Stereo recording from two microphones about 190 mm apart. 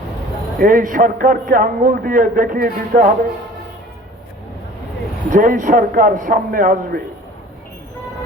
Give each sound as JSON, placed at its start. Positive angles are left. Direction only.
{"t": 0.6, "sound": "a man's voice", "side_deg": -45}
{"t": 5.3, "sound": "a man's voice", "side_deg": -45}